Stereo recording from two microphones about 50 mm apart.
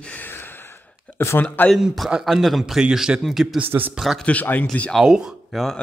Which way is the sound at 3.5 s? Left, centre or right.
Right.